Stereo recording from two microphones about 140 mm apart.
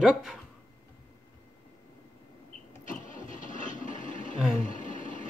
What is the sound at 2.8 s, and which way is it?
Engine starting, 70° left (ahead or behind).